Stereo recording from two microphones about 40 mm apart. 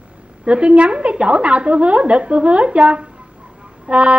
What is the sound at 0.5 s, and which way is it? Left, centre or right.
A woman's voice, right.